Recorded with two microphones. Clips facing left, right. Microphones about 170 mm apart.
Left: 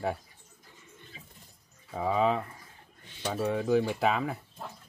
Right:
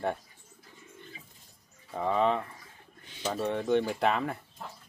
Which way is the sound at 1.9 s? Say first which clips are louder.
Even; 5° left (ahead or behind).